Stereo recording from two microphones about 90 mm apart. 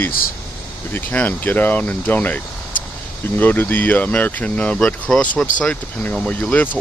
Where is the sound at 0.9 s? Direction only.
25° left (ahead or behind).